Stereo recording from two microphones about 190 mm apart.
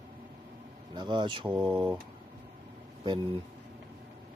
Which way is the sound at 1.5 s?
5° right (ahead or behind).